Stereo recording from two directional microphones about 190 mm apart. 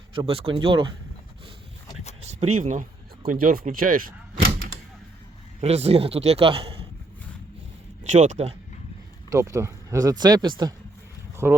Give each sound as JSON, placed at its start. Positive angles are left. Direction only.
{"t": 0.1, "sound": "speech", "side_deg": -30}
{"t": 2.2, "sound": "speech", "side_deg": -35}
{"t": 5.5, "sound": "a man's voice", "side_deg": -35}
{"t": 8.0, "sound": "a man's voice", "side_deg": -40}
{"t": 9.3, "sound": "speech", "side_deg": -15}
{"t": 11.4, "sound": "speech", "side_deg": -5}